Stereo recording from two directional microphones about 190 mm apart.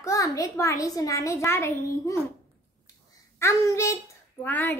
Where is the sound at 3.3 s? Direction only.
15° left (ahead or behind).